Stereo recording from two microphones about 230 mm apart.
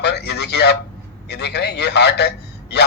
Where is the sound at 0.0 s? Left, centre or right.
Left.